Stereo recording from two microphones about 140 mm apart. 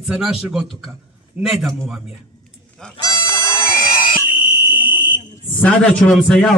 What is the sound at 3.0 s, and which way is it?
Goat, 25° left (ahead or behind).